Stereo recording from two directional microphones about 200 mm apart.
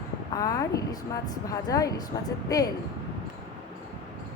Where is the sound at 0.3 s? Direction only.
15° left (ahead or behind).